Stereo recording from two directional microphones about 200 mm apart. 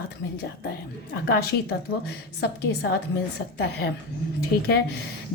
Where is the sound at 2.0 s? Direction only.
55° left (ahead or behind).